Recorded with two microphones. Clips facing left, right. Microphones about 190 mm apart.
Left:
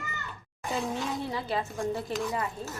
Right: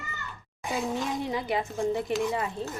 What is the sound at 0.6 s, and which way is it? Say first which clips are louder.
A woman's voice: right 2 dB; 15° right (ahead or behind).